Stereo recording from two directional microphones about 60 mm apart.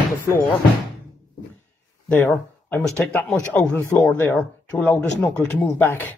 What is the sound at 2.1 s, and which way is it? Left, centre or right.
Speech, left.